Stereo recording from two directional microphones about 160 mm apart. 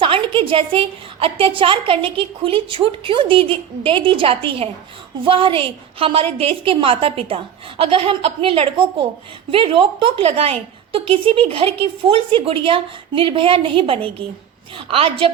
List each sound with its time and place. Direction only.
0.0 s a woman's voice: 35° right (ahead or behind)